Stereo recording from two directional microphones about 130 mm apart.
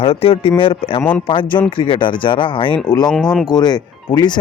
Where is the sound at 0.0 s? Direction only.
45° left (ahead or behind).